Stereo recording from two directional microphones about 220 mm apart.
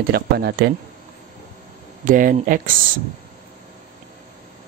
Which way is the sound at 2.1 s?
40° right (ahead or behind).